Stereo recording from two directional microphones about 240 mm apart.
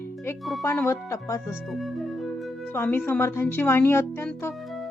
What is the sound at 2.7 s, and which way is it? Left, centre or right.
Speech, centre.